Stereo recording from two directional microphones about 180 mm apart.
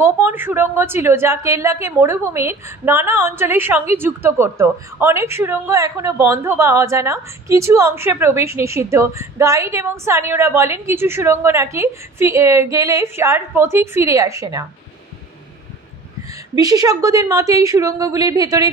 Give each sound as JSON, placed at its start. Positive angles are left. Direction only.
{"t": 0.0, "sound": "a woman's voice", "side_deg": -15}
{"t": 16.5, "sound": "a woman's voice", "side_deg": -20}